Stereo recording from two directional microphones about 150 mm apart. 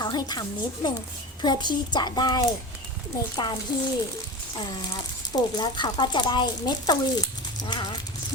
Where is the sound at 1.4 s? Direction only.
30° left (ahead or behind).